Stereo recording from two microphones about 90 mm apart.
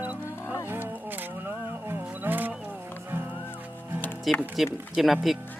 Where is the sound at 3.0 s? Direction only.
25° right (ahead or behind).